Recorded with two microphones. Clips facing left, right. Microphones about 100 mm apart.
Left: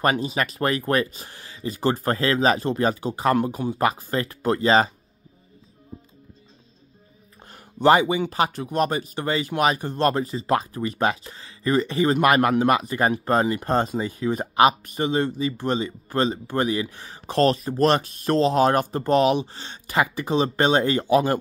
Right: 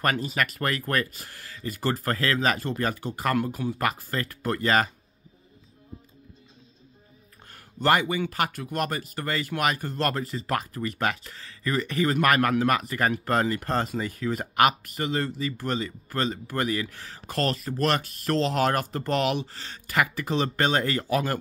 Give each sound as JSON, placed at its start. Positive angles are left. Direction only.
{"t": 0.0, "sound": "speech", "side_deg": 20}
{"t": 7.5, "sound": "speech", "side_deg": 20}